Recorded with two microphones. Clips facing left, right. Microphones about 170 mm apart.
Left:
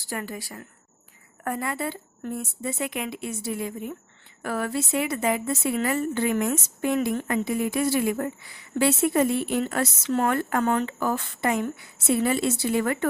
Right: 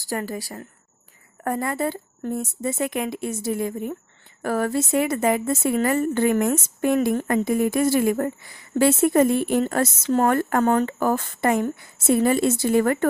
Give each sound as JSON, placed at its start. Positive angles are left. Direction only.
{"t": 0.0, "sound": "a woman's voice", "side_deg": -40}